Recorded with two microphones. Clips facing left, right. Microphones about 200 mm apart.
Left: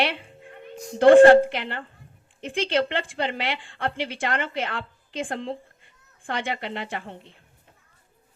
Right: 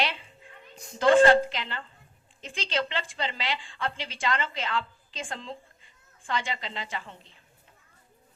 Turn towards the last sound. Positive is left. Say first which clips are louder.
# left 4 dB
turn(degrees=60)  # may be behind; listen again after turning